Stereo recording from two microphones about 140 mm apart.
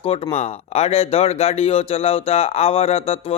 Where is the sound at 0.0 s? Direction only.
40° left (ahead or behind).